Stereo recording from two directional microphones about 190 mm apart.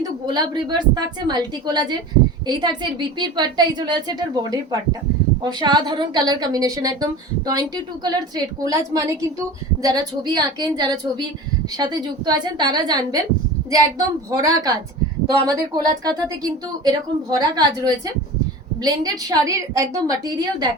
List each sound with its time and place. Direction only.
0.3 s a woman's voice: 20° right (ahead or behind)
8.6 s a woman's voice: 20° right (ahead or behind)
14.3 s a woman's voice: 20° right (ahead or behind)